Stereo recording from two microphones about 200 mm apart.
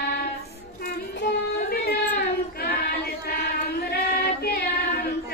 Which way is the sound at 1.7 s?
50° left (ahead or behind).